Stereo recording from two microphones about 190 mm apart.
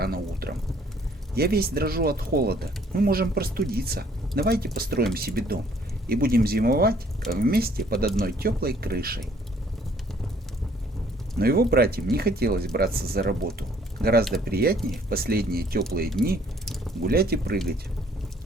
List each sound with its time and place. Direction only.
0.0 s a sound: 55° right (ahead or behind)
1.4 s speech: 55° right (ahead or behind)
11.3 s speech: 55° right (ahead or behind)
13.6 s a sound: 55° right (ahead or behind)
14.4 s speech: 55° right (ahead or behind)
17.1 s speech: 55° right (ahead or behind)